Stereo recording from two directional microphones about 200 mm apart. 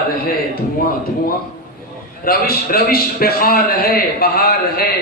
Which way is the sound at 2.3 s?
50° left (ahead or behind).